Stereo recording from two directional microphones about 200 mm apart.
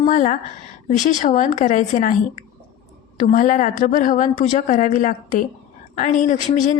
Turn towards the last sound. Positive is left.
turn(degrees=40)  # may be behind; listen again after turning